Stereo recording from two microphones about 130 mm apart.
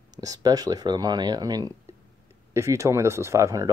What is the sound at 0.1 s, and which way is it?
Speech, 30° right (ahead or behind).